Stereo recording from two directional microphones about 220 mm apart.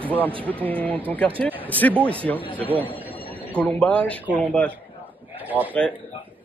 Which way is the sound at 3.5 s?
5° left (ahead or behind).